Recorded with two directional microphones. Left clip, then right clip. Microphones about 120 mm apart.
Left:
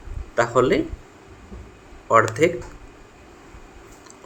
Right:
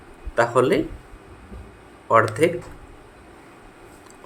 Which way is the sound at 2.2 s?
10° left (ahead or behind).